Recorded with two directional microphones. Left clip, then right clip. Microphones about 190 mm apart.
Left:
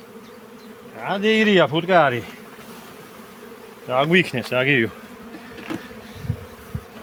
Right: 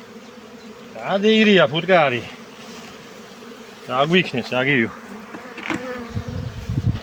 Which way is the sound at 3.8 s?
50° left (ahead or behind).